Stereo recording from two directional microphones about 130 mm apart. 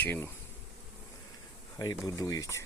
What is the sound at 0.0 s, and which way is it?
Speech, 15° left (ahead or behind).